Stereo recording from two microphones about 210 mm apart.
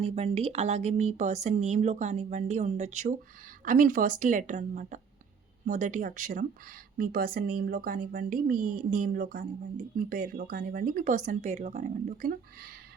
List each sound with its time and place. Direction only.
0.0 s speech: 30° right (ahead or behind)